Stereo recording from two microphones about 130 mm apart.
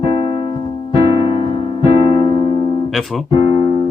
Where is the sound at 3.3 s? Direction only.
50° left (ahead or behind).